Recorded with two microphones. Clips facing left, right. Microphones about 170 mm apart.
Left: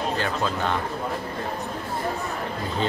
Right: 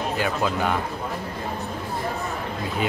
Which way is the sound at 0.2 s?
10° right (ahead or behind).